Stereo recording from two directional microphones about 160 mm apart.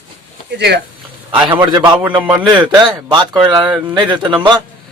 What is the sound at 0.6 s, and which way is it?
Speech, 90° right.